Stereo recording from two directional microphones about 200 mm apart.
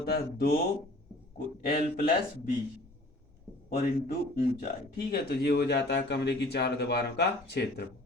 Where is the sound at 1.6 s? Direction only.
45° left (ahead or behind).